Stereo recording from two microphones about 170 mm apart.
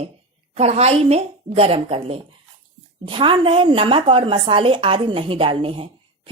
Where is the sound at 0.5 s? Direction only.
40° right (ahead or behind).